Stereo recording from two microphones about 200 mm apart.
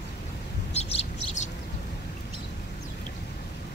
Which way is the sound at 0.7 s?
30° left (ahead or behind).